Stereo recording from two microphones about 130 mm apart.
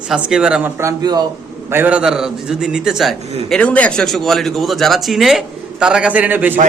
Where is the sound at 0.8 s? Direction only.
30° right (ahead or behind).